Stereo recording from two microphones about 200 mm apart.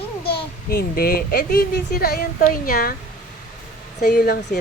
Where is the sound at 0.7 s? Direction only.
45° left (ahead or behind).